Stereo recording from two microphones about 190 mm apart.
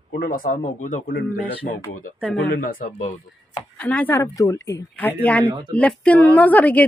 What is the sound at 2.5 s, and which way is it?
Speech, 45° left (ahead or behind).